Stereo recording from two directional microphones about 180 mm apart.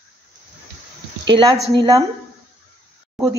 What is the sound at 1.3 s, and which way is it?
Speech, 25° right (ahead or behind).